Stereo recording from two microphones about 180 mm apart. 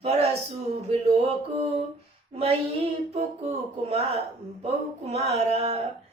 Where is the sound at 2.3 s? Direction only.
35° right (ahead or behind).